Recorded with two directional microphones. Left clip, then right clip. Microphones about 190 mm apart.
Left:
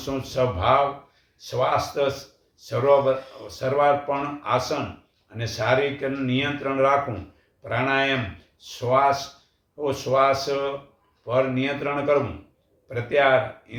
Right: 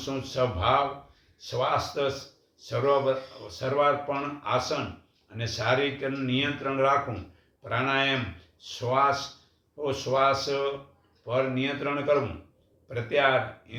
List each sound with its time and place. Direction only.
0.0 s speech: 5° left (ahead or behind)